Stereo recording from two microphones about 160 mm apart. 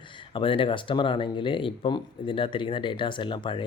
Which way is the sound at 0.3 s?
35° left (ahead or behind).